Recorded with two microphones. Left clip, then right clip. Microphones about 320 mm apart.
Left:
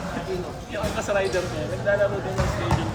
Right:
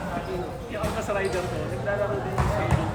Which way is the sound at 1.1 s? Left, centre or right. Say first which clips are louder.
Left 5 dB; left.